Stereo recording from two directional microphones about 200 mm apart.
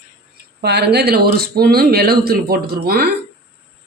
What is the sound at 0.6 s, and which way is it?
Speech, 55° right (ahead or behind).